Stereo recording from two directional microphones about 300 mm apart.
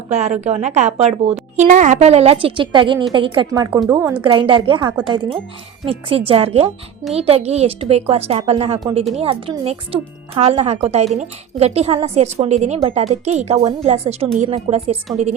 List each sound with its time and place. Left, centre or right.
0.1 s a woman's voice: right